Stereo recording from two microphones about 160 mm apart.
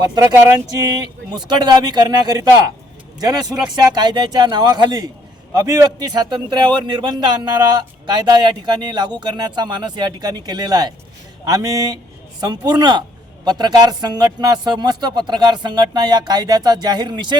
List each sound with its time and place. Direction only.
0.1 s a man's voice: 25° right (ahead or behind)